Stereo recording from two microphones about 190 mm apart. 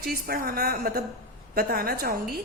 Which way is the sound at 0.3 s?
50° right (ahead or behind).